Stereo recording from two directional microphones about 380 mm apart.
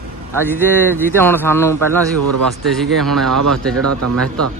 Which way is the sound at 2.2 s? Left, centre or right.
Right.